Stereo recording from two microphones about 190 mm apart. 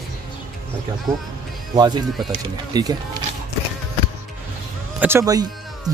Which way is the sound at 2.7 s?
20° right (ahead or behind).